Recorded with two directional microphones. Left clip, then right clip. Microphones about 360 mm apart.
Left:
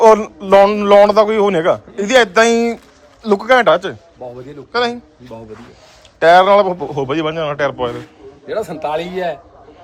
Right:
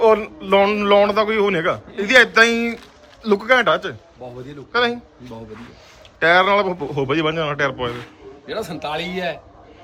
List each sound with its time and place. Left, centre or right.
0.2 s a man's voice: centre
4.7 s a man's voice: centre
6.1 s a man's voice: centre
8.4 s a man's voice: centre